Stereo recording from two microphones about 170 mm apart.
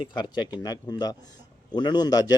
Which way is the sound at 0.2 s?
25° left (ahead or behind).